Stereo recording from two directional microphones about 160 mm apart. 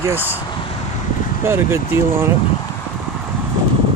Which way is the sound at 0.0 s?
15° right (ahead or behind).